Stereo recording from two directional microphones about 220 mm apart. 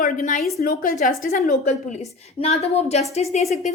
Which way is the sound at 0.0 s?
35° left (ahead or behind).